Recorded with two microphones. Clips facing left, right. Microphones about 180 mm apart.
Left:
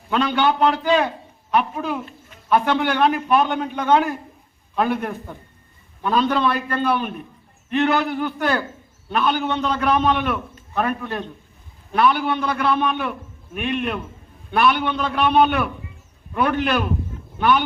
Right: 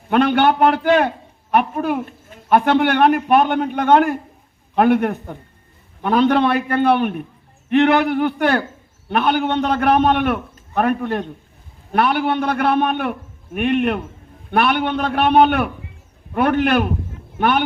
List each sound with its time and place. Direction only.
0.1 s a man's voice: 55° right (ahead or behind)